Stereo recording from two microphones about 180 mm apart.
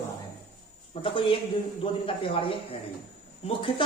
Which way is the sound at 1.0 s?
30° left (ahead or behind).